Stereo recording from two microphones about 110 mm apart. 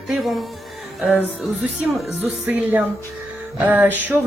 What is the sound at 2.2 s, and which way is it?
Speech, 15° right (ahead or behind).